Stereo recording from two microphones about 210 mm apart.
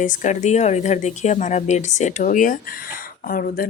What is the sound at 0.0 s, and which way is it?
Speech, 35° left (ahead or behind).